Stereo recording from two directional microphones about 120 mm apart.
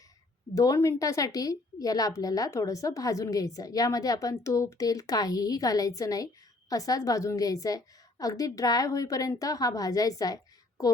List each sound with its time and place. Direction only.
0.5 s a woman's voice: 30° left (ahead or behind)